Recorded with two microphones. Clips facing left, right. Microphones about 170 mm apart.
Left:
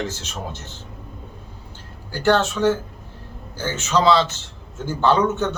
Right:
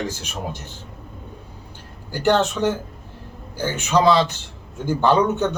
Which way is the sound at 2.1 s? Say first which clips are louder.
Even; 15° right (ahead or behind).